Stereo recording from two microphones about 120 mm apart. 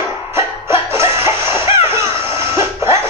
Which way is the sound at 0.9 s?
20° right (ahead or behind).